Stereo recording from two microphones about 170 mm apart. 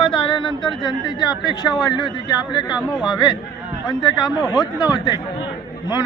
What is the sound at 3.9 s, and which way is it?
Speech, 25° left (ahead or behind).